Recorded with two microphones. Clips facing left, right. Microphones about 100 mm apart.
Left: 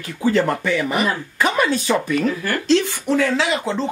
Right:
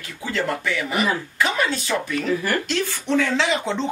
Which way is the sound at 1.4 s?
50° left (ahead or behind).